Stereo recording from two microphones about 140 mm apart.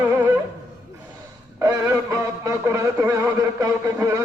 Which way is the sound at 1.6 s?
20° right (ahead or behind).